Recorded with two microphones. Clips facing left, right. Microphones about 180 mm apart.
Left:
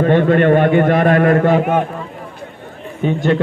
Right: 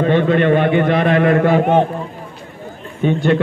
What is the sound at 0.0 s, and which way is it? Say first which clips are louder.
A man's voice: left 2 dB; 45° left (ahead or behind).